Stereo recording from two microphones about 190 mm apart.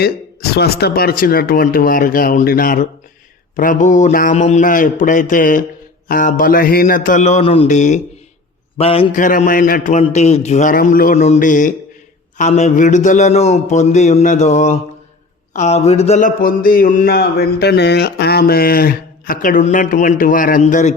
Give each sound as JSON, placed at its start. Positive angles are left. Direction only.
{"t": 0.0, "sound": "a man's voice", "side_deg": 60}
{"t": 9.2, "sound": "a man's voice", "side_deg": 45}